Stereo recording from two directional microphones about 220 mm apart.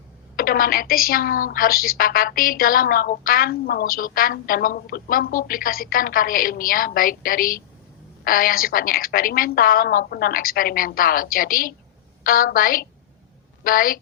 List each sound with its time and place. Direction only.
0.3 s a woman's voice: 40° left (ahead or behind)